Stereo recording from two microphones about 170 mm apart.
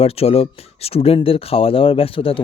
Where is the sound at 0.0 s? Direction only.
35° left (ahead or behind).